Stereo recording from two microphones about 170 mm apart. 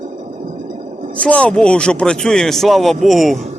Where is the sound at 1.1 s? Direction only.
5° left (ahead or behind).